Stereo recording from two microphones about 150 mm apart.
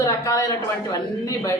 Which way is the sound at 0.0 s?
20° left (ahead or behind).